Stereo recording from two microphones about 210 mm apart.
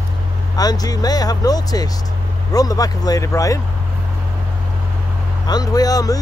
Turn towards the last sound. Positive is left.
turn(degrees=15)  # may be behind; listen again after turning